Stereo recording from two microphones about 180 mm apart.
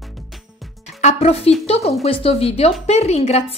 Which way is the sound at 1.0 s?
35° left (ahead or behind).